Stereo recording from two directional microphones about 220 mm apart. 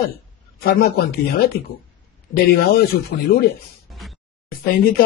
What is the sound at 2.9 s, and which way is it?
Speech, 40° left (ahead or behind).